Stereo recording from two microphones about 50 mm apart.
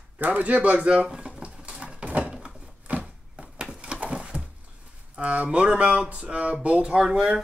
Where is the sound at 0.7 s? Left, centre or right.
Right.